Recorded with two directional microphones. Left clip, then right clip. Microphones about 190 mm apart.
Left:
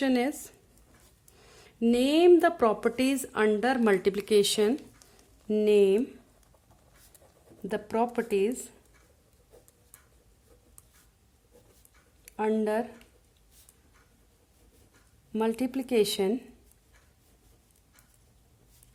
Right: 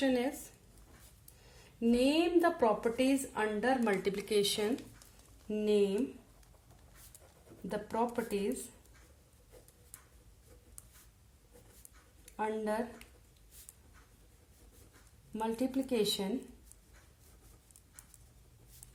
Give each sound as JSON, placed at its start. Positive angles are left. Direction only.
{"t": 0.0, "sound": "speech", "side_deg": 50}
{"t": 1.4, "sound": "speech", "side_deg": 55}
{"t": 7.7, "sound": "speech", "side_deg": 50}
{"t": 12.2, "sound": "speech", "side_deg": 55}
{"t": 15.3, "sound": "speech", "side_deg": 55}